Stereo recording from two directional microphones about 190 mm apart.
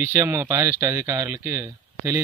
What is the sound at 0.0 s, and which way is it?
Speech, 10° right (ahead or behind).